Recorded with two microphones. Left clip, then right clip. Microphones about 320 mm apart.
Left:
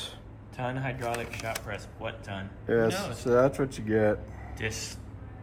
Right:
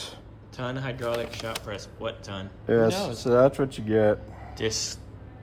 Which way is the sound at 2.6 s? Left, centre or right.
Right.